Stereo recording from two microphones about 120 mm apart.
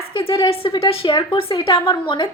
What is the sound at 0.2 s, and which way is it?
A woman's voice, 50° left (ahead or behind).